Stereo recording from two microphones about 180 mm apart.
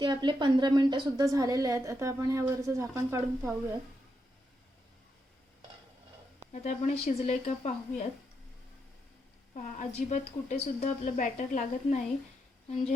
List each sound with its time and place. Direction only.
0.0 s a woman's voice: 25° right (ahead or behind)
6.5 s a woman's voice: 40° left (ahead or behind)
9.6 s a woman's voice: 45° left (ahead or behind)